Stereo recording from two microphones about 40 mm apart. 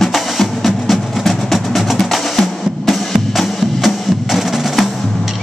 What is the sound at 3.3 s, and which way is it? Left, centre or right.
Music, centre.